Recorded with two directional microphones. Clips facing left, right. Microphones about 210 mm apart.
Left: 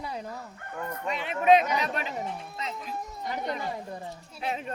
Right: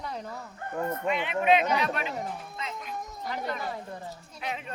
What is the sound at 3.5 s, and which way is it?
Speech, 15° left (ahead or behind).